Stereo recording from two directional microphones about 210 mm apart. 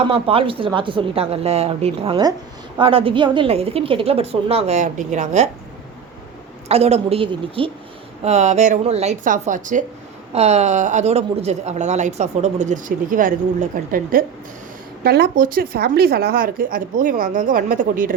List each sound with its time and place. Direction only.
0.1 s a woman's voice: 25° right (ahead or behind)
6.7 s a woman's voice: 30° right (ahead or behind)